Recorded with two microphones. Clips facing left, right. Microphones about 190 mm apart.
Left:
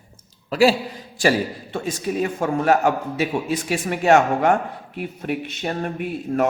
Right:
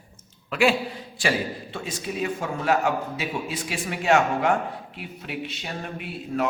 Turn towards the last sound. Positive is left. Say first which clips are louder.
# left 6 dB
turn(degrees=50)  # may be behind; listen again after turning